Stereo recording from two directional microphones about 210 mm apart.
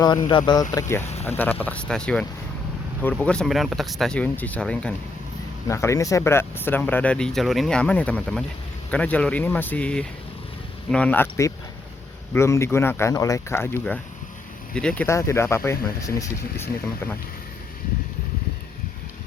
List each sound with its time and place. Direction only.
0.3 s speech: 20° left (ahead or behind)